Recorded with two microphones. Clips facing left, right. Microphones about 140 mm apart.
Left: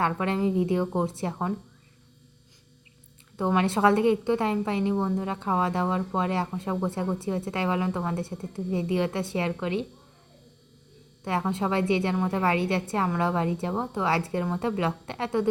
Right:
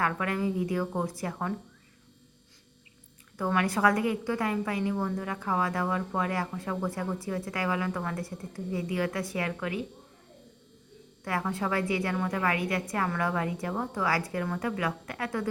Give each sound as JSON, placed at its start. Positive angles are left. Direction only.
{"t": 0.0, "sound": "a woman's voice", "side_deg": 25}
{"t": 3.3, "sound": "a woman's voice", "side_deg": 25}
{"t": 11.2, "sound": "a woman's voice", "side_deg": 25}